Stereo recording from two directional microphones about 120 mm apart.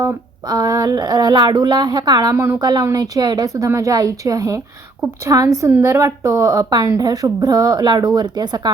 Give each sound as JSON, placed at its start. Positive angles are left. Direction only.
{"t": 0.4, "sound": "a woman's voice", "side_deg": -35}
{"t": 2.3, "sound": "speech", "side_deg": -20}
{"t": 2.6, "sound": "a woman's voice", "side_deg": -35}